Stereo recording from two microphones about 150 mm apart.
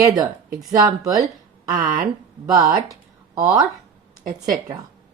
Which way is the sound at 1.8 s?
60° right (ahead or behind).